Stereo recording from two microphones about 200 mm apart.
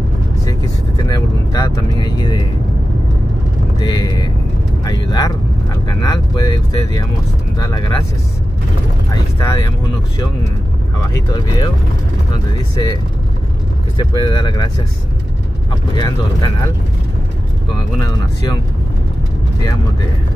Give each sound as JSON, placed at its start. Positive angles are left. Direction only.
{"t": 1.0, "sound": "speech", "side_deg": 20}
{"t": 3.8, "sound": "speech", "side_deg": 20}
{"t": 9.1, "sound": "speech", "side_deg": 15}
{"t": 11.3, "sound": "speech", "side_deg": 20}
{"t": 12.7, "sound": "speech", "side_deg": 20}
{"t": 16.0, "sound": "speech", "side_deg": 25}